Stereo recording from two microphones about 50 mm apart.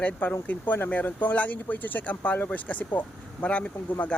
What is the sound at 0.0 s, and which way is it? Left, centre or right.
Speech, left.